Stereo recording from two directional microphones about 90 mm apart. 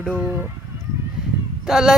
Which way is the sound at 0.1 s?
15° right (ahead or behind).